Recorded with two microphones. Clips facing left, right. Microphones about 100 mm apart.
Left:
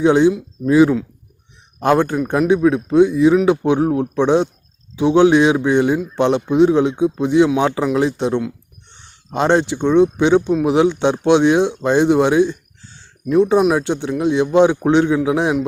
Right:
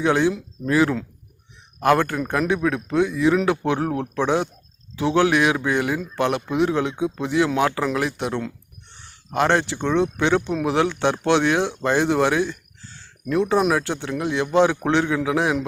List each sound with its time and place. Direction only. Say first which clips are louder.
0.0 s speech: left 7 dB; 20° left (ahead or behind)